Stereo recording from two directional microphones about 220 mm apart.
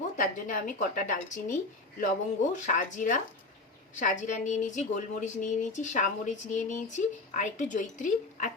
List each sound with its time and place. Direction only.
0.2 s a woman's voice: 40° left (ahead or behind)